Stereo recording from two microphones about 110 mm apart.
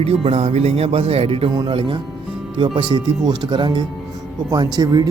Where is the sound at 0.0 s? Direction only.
65° right (ahead or behind).